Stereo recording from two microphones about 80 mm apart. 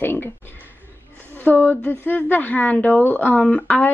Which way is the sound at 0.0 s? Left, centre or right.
Left.